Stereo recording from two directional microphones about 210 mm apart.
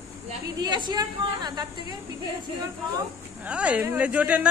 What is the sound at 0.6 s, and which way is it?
A woman's voice, 20° right (ahead or behind).